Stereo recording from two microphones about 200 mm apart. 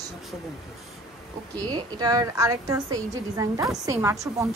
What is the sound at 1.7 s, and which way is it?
A woman's voice, 20° right (ahead or behind).